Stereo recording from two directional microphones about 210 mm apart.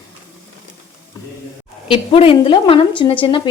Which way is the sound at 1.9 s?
25° left (ahead or behind).